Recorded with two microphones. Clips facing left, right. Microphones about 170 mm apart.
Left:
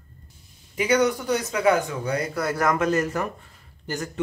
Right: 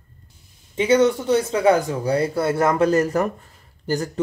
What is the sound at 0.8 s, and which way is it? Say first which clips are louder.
Speech: right 4 dB; 25° right (ahead or behind).